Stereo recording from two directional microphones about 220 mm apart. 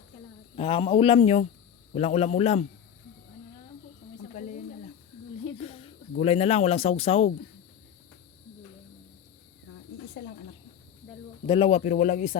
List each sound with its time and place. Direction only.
0.5 s speech: 25° left (ahead or behind)
4.4 s a sound: 35° left (ahead or behind)
5.5 s speech: 30° left (ahead or behind)
11.4 s a man's voice: 25° left (ahead or behind)